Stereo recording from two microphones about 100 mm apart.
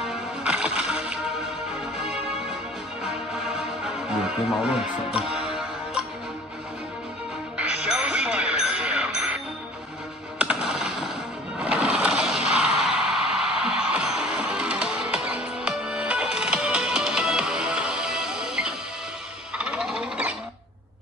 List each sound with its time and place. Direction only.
0.4 s music: 10° right (ahead or behind)
4.5 s music: 5° right (ahead or behind)
7.5 s music: 10° right (ahead or behind)
10.4 s music: 10° right (ahead or behind)
19.6 s a sound: 10° right (ahead or behind)